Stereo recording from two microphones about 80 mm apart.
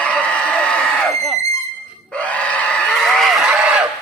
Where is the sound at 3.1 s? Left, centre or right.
Centre.